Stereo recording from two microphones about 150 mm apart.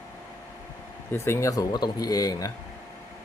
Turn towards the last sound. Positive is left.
turn(degrees=25)  # may be behind; listen again after turning